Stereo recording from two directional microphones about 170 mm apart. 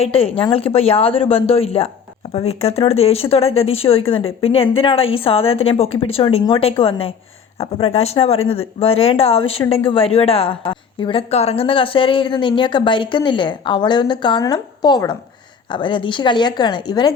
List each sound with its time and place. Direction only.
0.0 s a woman's voice: 35° left (ahead or behind)